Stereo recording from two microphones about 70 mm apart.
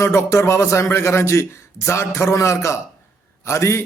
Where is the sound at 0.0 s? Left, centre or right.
Left.